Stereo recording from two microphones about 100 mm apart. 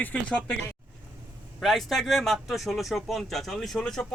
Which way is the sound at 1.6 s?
Centre (ahead or behind).